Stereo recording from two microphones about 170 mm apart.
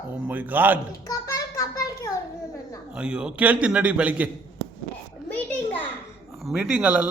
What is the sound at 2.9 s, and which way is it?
A man's voice, 5° right (ahead or behind).